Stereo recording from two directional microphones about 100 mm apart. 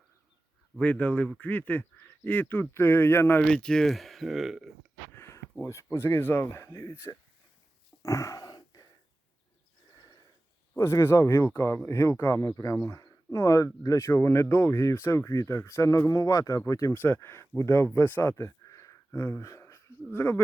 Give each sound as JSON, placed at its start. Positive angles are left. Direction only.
{"t": 0.8, "sound": "speech", "side_deg": 15}
{"t": 3.4, "sound": "speech", "side_deg": 5}
{"t": 5.1, "sound": "speech", "side_deg": 25}
{"t": 8.0, "sound": "a sound", "side_deg": 30}
{"t": 10.0, "sound": "sniff", "side_deg": 40}
{"t": 10.8, "sound": "speech", "side_deg": 30}
{"t": 16.9, "sound": "speech", "side_deg": 20}